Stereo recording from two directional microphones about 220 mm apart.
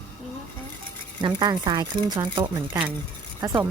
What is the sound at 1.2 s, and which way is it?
Speech, 20° right (ahead or behind).